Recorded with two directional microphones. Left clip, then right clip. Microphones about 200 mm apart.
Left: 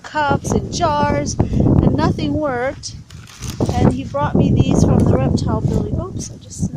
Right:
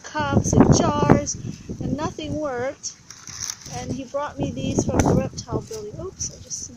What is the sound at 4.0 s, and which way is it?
Speech, 15° left (ahead or behind).